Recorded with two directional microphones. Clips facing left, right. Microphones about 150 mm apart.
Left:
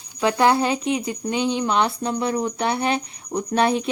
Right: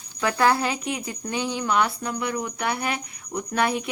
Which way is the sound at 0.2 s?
20° left (ahead or behind).